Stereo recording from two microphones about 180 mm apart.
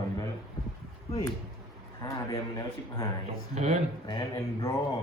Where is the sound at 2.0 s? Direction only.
20° left (ahead or behind).